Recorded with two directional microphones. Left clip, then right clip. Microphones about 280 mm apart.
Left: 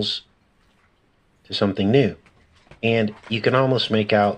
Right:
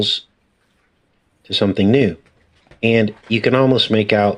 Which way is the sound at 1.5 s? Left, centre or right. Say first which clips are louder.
Right 5 dB; right.